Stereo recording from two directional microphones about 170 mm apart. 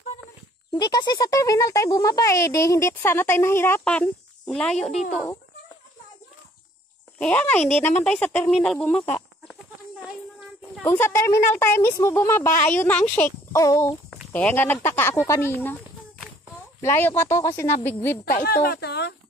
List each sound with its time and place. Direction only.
0.7 s speech: 25° left (ahead or behind); by 4.9 s 5° left (ahead or behind)
7.2 s speech: 10° left (ahead or behind)
10.8 s speech: 15° left (ahead or behind)
17.0 s speech: 15° left (ahead or behind)
18.2 s speech: 60° left (ahead or behind)